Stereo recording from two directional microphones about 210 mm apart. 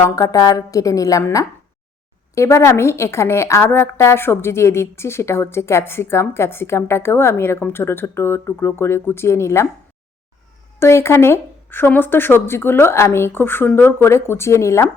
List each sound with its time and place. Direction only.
0.0 s a woman's voice: 15° left (ahead or behind)
10.8 s a woman's voice: 10° left (ahead or behind)